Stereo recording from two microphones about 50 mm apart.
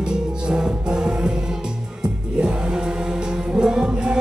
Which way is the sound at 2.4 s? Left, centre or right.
Centre.